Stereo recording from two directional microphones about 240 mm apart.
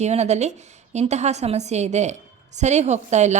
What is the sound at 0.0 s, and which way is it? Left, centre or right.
A woman's voice, right.